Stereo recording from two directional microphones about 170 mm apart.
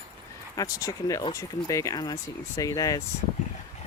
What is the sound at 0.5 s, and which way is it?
Speech, 20° left (ahead or behind).